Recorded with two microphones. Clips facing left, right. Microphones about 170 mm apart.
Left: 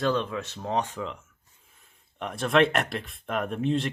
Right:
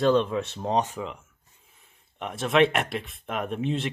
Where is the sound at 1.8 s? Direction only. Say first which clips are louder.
Even; centre (ahead or behind).